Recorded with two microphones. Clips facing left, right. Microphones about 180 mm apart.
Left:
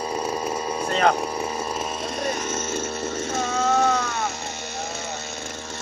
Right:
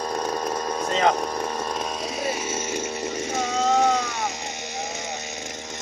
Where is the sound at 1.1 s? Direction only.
10° left (ahead or behind); by 4.0 s 15° right (ahead or behind).